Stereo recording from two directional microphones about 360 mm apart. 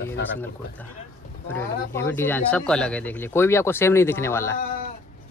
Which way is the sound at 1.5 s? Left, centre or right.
Centre.